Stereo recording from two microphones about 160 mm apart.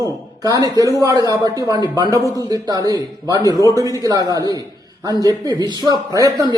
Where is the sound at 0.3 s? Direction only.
20° right (ahead or behind).